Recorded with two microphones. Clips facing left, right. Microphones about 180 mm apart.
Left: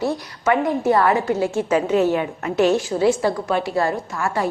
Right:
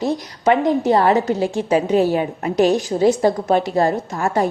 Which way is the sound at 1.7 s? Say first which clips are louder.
Right 2 dB; 35° right (ahead or behind).